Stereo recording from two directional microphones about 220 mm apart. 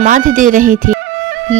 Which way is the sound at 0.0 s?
35° right (ahead or behind).